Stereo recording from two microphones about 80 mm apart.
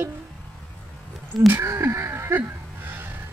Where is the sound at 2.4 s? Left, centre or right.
Right.